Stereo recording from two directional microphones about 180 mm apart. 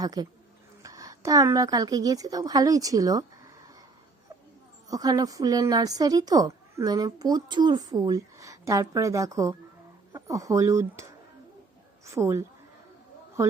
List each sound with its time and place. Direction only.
0.0 s a woman's voice: 20° right (ahead or behind)
4.9 s a woman's voice: 20° right (ahead or behind)